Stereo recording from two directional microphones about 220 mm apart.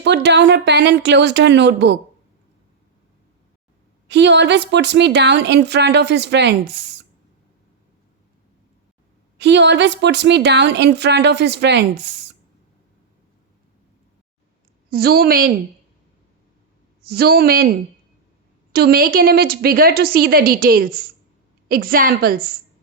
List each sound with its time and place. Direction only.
0.0 s a woman's voice: 50° right (ahead or behind)
4.1 s a woman's voice: 50° right (ahead or behind)
9.4 s a woman's voice: 50° right (ahead or behind)
14.8 s a woman's voice: 45° right (ahead or behind)
17.0 s a woman's voice: 45° right (ahead or behind)